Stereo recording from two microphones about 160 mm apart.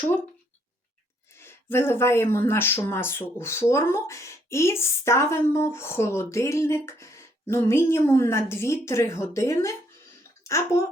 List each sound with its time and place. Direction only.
1.4 s speech: 15° left (ahead or behind)